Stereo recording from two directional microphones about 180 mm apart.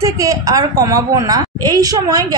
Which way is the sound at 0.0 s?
20° right (ahead or behind).